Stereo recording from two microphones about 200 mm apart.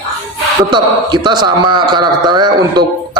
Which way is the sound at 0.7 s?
20° right (ahead or behind).